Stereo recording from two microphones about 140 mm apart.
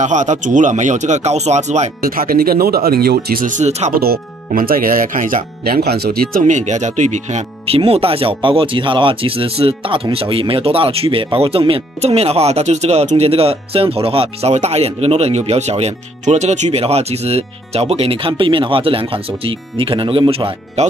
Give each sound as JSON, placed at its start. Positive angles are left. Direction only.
{"t": 0.0, "sound": "speech", "side_deg": -60}
{"t": 2.0, "sound": "speech", "side_deg": -90}
{"t": 3.9, "sound": "speech", "side_deg": -90}